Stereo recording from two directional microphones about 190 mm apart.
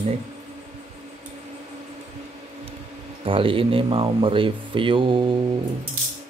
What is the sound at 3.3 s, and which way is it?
Speech, 30° right (ahead or behind).